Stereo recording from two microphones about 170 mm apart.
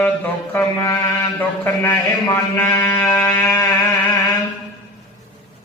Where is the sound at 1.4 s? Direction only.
15° left (ahead or behind).